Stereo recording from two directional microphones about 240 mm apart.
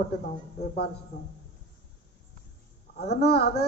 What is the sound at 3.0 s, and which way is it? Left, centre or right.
Speech, left.